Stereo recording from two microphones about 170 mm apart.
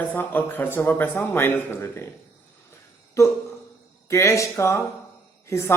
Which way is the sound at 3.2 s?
20° left (ahead or behind).